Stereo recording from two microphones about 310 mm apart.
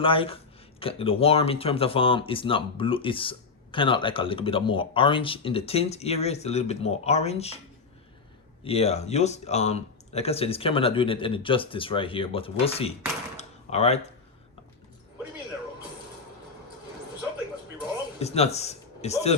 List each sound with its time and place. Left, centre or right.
0.0 s speech: centre
8.6 s speech: centre
13.3 s a sound: left
18.2 s speech: centre